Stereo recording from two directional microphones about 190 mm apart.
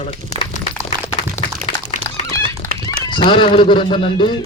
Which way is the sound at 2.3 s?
15° left (ahead or behind).